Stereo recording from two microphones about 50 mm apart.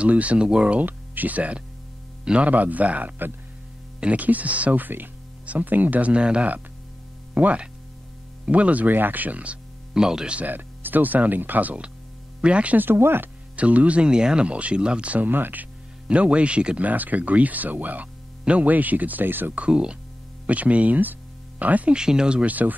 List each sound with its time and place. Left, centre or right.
0.0 s speech: right
0.7 s speech: right
4.8 s speech: right
9.9 s speech: centre
10.3 s speech: right
12.7 s speech: right
13.6 s speech: right
15.2 s speech: right
19.6 s speech: centre
21.9 s speech: centre
22.4 s speech: right